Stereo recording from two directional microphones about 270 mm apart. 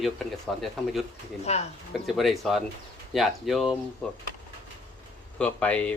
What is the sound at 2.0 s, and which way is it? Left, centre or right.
Speech, centre.